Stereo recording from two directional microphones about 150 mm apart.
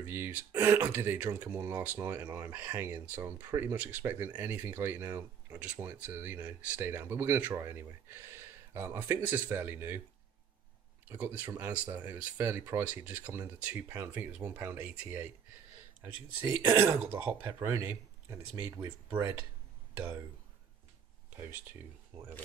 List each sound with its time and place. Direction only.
0.0 s speech: 15° right (ahead or behind)
11.1 s speech: 15° right (ahead or behind)